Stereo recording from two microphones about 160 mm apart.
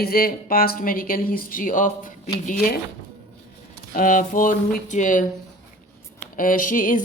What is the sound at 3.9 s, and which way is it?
Speech, 55° left (ahead or behind).